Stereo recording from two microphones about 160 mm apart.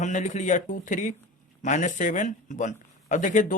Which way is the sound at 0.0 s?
50° left (ahead or behind).